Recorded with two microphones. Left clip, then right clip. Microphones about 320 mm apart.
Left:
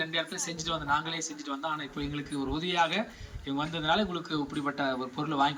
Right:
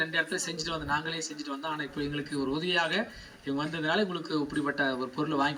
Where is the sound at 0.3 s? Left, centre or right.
Left.